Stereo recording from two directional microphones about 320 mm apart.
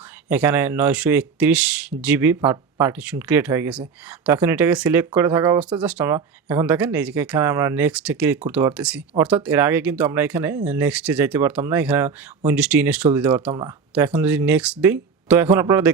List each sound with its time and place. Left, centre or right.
0.3 s speech: centre